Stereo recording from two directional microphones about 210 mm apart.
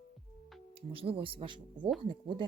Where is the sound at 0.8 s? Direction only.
25° right (ahead or behind).